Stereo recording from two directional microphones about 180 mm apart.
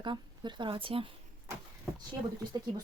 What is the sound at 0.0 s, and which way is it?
Speech, 25° right (ahead or behind).